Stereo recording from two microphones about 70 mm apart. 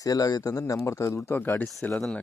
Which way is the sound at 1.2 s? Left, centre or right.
Left.